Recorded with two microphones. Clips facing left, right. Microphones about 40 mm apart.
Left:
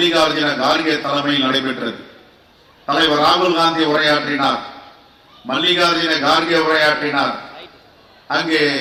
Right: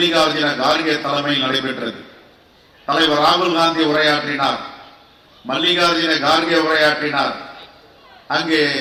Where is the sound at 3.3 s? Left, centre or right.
Left.